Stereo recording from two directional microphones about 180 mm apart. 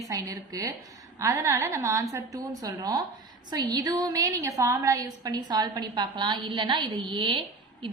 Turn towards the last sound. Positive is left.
turn(degrees=-30)  # may be behind; listen again after turning